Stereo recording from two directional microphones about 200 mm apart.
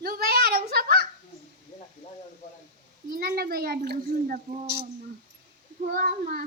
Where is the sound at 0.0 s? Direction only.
50° right (ahead or behind).